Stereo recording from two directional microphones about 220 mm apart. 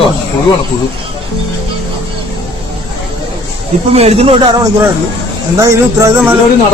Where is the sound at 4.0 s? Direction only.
30° right (ahead or behind).